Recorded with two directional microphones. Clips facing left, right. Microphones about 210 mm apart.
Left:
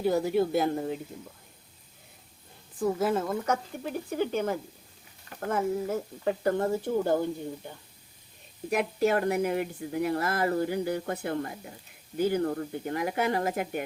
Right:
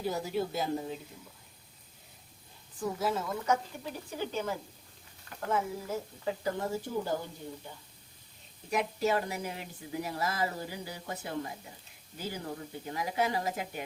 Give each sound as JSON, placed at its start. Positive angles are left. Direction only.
{"t": 0.0, "sound": "speech", "side_deg": 60}
{"t": 2.7, "sound": "speech", "side_deg": 55}
{"t": 8.7, "sound": "speech", "side_deg": 60}